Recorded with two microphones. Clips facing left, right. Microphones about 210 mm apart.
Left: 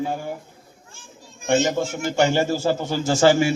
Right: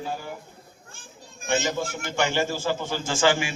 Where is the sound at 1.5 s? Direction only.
55° left (ahead or behind).